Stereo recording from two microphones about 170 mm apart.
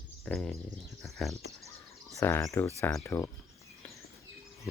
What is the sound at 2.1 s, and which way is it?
Speech, 15° left (ahead or behind).